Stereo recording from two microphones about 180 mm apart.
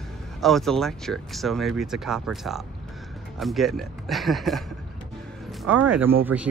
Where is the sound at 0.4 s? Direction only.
Centre (ahead or behind).